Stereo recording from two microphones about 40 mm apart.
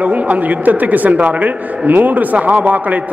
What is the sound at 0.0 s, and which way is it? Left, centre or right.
A man's voice, right.